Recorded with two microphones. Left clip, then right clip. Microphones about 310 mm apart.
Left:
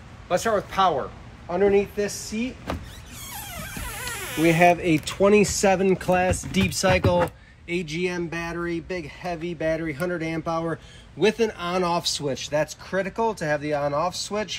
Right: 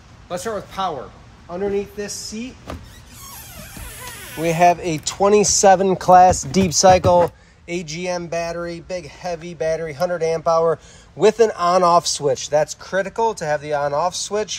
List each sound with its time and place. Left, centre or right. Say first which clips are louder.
0.3 s speech: left 3 dB; centre
4.5 s a man's voice: right 3 dB; centre